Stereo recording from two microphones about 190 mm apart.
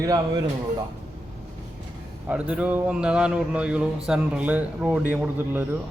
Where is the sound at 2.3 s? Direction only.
5° right (ahead or behind).